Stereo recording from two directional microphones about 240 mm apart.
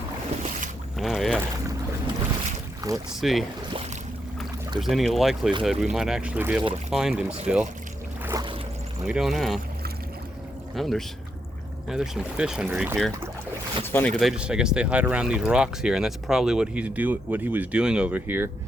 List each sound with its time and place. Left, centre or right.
0.9 s boat: centre
2.8 s speech: centre
3.2 s speech: centre
3.7 s boat: right
4.8 s speech: centre
8.2 s boat: centre
9.0 s speech: centre
10.8 s speech: centre